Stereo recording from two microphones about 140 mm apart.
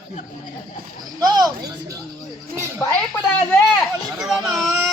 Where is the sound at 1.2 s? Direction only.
30° right (ahead or behind).